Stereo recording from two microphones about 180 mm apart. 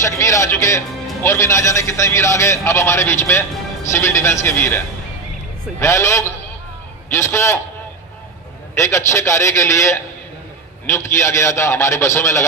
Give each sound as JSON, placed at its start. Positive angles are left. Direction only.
{"t": 0.0, "sound": "a man's voice", "side_deg": 15}
{"t": 5.8, "sound": "a man's voice", "side_deg": 15}
{"t": 8.7, "sound": "a man's voice", "side_deg": 15}